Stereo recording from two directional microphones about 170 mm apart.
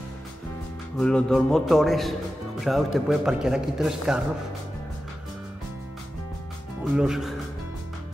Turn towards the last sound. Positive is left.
turn(degrees=-5)  # may be behind; listen again after turning